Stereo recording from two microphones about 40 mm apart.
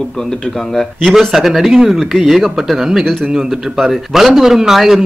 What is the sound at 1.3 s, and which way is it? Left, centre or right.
A man's voice, centre.